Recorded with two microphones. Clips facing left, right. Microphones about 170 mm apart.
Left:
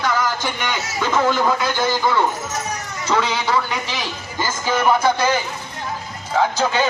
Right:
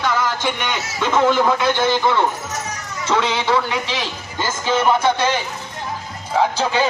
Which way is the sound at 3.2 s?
5° left (ahead or behind).